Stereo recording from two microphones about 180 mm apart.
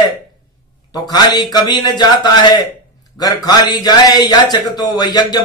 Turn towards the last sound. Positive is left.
turn(degrees=20)  # may be behind; listen again after turning